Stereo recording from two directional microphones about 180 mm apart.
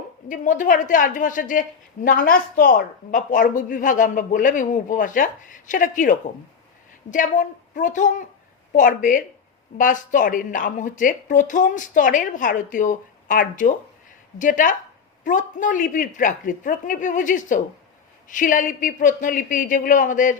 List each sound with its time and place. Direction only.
0.3 s speech: 45° left (ahead or behind)